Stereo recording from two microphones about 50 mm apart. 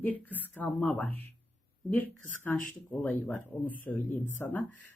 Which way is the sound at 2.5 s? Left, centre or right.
Left.